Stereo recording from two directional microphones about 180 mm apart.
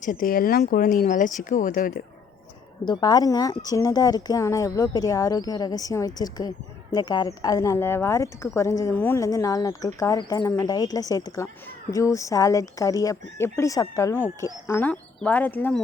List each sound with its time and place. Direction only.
0.0 s speech: 50° left (ahead or behind)
2.8 s speech: 25° left (ahead or behind)